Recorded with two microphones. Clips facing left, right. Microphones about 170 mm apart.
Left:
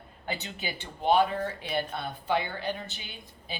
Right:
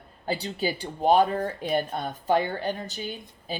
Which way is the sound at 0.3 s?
35° right (ahead or behind).